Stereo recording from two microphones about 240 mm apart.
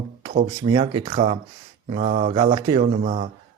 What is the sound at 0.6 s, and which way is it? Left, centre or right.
A man's voice, centre.